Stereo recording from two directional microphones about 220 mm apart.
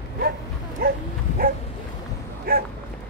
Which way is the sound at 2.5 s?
40° right (ahead or behind).